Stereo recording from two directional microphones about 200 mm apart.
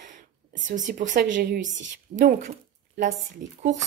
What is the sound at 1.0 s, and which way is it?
Speech, 65° right (ahead or behind).